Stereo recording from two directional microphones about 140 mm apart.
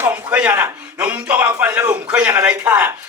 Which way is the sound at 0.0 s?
10° right (ahead or behind).